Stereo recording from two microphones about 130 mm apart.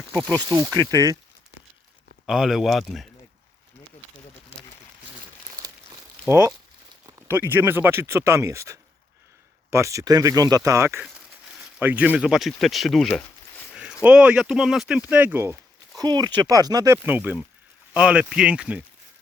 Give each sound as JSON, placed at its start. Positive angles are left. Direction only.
{"t": 0.3, "sound": "speech", "side_deg": -30}
{"t": 2.2, "sound": "a man's voice", "side_deg": -5}
{"t": 6.2, "sound": "speech", "side_deg": -20}
{"t": 11.0, "sound": "a sound", "side_deg": -5}
{"t": 11.8, "sound": "speech", "side_deg": -15}
{"t": 14.0, "sound": "speech", "side_deg": -10}
{"t": 16.0, "sound": "speech", "side_deg": -30}